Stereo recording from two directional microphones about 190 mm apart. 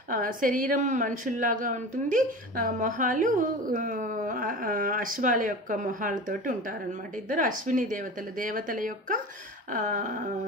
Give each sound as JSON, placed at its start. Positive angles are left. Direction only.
{"t": 0.1, "sound": "a woman's voice", "side_deg": -45}